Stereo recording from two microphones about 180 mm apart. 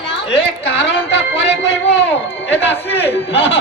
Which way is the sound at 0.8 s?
90° left.